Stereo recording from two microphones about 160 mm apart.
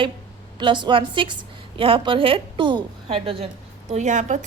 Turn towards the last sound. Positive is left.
turn(degrees=-50)  # may be behind; listen again after turning